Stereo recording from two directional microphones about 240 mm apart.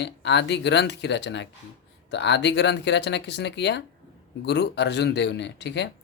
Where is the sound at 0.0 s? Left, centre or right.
Left.